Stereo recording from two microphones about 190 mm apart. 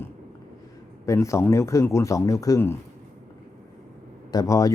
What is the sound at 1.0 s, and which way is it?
Speech, 15° left (ahead or behind).